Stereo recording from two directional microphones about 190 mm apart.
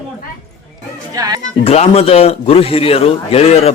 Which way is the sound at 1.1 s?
20° right (ahead or behind).